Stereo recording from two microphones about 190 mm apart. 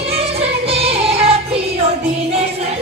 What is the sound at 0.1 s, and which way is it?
Music, 30° right (ahead or behind).